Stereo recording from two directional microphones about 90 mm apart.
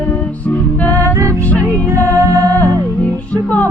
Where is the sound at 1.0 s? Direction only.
35° right (ahead or behind).